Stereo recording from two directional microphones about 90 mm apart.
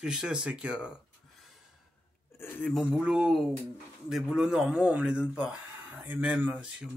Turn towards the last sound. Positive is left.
turn(degrees=-10)  # may be behind; listen again after turning